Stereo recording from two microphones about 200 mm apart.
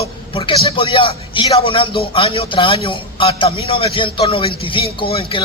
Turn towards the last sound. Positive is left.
turn(degrees=25)  # may be behind; listen again after turning